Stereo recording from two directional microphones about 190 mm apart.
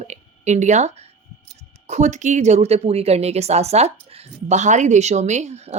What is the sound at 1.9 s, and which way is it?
Speech, 40° right (ahead or behind).